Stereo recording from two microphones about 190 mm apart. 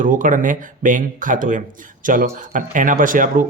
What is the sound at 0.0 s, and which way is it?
Speech, 45° right (ahead or behind).